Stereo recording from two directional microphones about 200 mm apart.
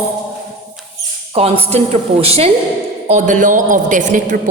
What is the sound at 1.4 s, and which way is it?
A woman's voice, 30° right (ahead or behind).